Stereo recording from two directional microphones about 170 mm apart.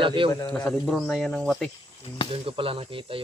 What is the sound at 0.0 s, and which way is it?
Speech, 30° right (ahead or behind).